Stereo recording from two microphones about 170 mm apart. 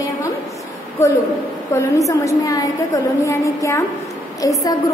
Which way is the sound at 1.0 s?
15° left (ahead or behind).